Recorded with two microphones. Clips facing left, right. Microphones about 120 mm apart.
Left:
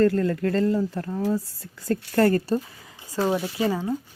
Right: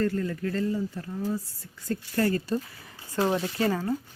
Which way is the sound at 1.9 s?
60° left (ahead or behind).